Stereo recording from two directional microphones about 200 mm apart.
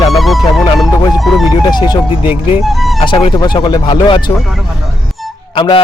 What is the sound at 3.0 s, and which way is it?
Speech, 25° left (ahead or behind).